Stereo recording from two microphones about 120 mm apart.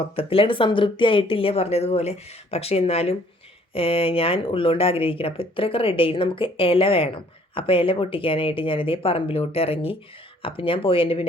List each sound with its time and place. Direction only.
0.0 s speech: 50° left (ahead or behind)